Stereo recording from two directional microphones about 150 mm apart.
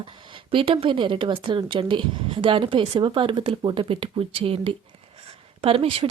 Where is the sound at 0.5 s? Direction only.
35° right (ahead or behind).